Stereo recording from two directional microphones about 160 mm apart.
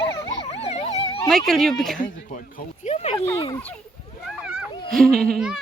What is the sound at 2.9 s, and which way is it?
Speech, 40° left (ahead or behind).